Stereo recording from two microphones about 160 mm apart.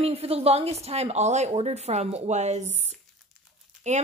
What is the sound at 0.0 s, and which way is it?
A woman's voice, 40° right (ahead or behind).